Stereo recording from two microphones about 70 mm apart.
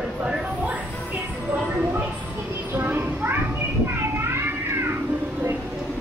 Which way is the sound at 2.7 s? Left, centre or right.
Right.